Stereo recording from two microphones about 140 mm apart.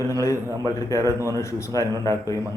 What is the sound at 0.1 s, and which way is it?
A man's voice, 20° left (ahead or behind).